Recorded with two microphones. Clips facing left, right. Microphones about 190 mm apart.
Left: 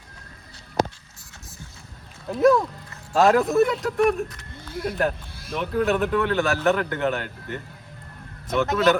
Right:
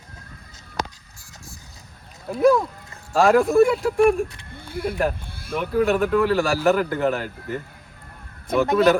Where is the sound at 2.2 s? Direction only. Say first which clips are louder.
Right 1 dB; centre (ahead or behind).